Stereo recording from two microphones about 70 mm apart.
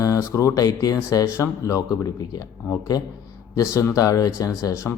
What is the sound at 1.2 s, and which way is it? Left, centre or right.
A man's voice, left.